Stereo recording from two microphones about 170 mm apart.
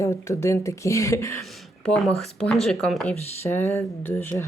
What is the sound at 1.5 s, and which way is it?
Speech, centre (ahead or behind).